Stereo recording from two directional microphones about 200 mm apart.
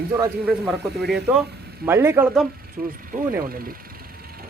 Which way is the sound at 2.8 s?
45° right (ahead or behind).